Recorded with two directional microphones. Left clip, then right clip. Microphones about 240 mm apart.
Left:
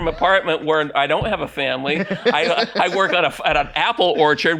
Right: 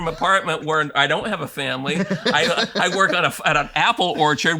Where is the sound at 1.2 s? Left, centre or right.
Right.